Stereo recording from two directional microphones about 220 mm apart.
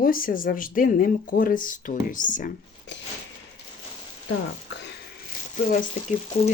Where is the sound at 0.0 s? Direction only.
40° left (ahead or behind).